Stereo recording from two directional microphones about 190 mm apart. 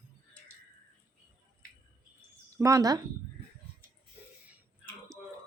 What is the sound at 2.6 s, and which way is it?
Speech, 15° right (ahead or behind).